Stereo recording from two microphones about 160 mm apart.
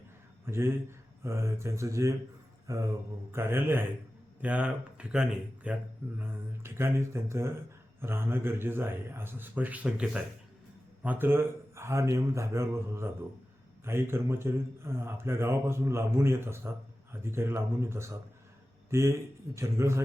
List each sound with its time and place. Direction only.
0.4 s a man's voice: 15° right (ahead or behind)